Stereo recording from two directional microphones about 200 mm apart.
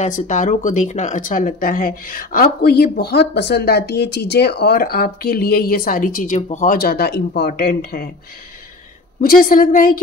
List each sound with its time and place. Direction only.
0.0 s speech: 40° left (ahead or behind)
9.2 s speech: 45° left (ahead or behind)